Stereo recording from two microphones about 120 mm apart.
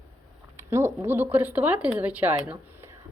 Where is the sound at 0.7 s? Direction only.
20° right (ahead or behind).